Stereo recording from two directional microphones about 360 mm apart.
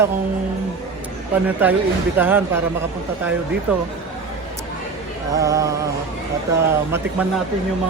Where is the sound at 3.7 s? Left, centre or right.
Centre.